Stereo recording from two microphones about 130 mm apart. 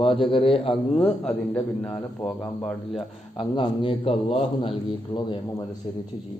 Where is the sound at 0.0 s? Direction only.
40° left (ahead or behind).